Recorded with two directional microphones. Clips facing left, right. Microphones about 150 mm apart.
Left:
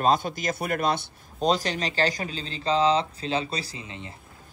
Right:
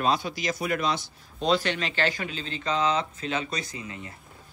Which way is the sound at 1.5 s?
40° left (ahead or behind).